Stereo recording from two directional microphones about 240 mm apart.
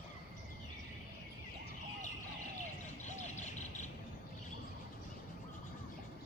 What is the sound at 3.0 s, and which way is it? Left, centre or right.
Bird, left.